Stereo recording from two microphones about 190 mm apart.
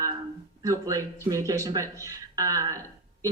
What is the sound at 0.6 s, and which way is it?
Speech, 15° right (ahead or behind).